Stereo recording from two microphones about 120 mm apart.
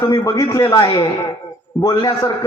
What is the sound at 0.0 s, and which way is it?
A man's voice, 30° left (ahead or behind).